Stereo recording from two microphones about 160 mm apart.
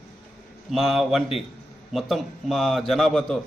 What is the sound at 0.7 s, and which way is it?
A man's voice, centre (ahead or behind).